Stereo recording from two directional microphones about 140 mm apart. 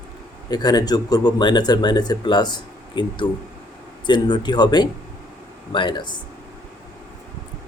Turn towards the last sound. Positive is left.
turn(degrees=30)  # may be behind; listen again after turning